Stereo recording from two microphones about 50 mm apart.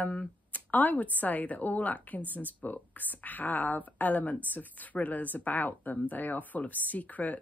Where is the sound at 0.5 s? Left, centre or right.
Left.